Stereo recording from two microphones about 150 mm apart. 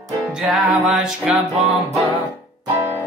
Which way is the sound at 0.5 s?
Centre (ahead or behind).